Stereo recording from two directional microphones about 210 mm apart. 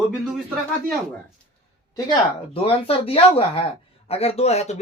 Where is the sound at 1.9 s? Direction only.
25° left (ahead or behind).